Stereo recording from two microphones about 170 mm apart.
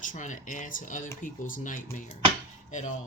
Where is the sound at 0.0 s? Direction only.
50° left (ahead or behind).